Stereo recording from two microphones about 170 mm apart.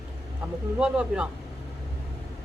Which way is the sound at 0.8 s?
5° right (ahead or behind).